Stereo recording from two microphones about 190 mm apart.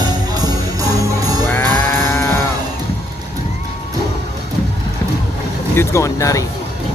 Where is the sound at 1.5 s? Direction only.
10° left (ahead or behind).